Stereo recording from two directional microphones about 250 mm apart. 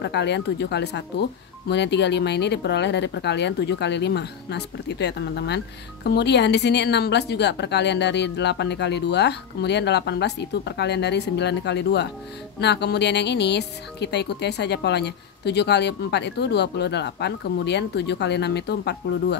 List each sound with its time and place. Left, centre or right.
0.0 s speech: left